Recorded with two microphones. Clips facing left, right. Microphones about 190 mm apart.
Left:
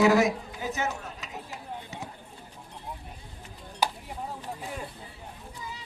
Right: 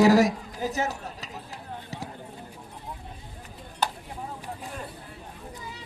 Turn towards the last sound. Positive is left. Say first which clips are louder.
# even
turn(degrees=10)  # may be behind; listen again after turning